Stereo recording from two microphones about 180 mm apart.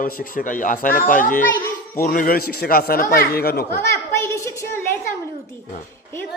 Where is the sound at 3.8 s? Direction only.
15° left (ahead or behind).